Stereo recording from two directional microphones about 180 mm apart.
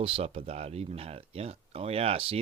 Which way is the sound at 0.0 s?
35° right (ahead or behind).